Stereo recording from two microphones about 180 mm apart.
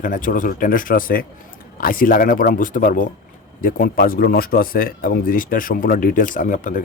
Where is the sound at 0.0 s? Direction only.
50° left (ahead or behind).